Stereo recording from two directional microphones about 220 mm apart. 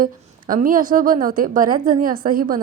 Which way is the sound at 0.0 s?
40° right (ahead or behind).